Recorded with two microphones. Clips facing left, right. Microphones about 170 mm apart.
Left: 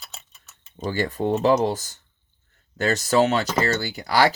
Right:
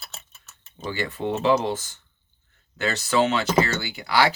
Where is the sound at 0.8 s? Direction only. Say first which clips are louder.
Left 4 dB; 40° left (ahead or behind).